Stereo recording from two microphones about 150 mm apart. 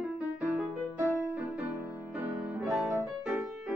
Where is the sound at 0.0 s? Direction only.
10° right (ahead or behind).